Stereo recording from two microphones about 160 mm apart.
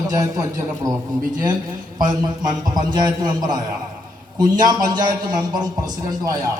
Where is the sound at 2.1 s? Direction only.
30° right (ahead or behind).